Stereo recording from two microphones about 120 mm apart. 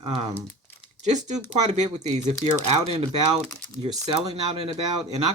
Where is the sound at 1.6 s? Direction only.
75° right (ahead or behind).